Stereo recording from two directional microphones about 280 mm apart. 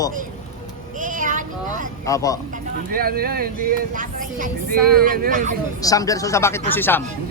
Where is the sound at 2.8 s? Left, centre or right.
Right.